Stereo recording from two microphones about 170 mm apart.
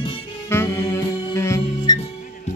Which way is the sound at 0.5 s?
15° left (ahead or behind).